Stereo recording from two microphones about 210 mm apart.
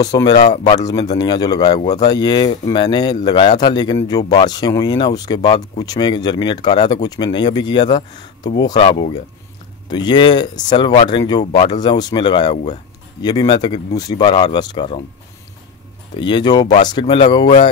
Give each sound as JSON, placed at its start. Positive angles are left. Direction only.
{"t": 0.0, "sound": "speech", "side_deg": 20}
{"t": 16.2, "sound": "speech", "side_deg": 20}